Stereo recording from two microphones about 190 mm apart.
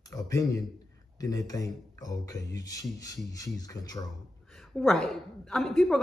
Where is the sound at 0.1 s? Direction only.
15° left (ahead or behind).